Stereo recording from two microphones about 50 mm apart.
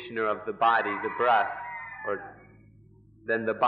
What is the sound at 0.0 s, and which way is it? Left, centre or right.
A man's voice, centre.